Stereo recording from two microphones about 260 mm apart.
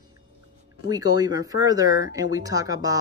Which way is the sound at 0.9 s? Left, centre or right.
Centre.